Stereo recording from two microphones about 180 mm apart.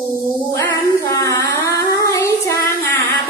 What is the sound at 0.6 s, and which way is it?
Child singing, 15° left (ahead or behind).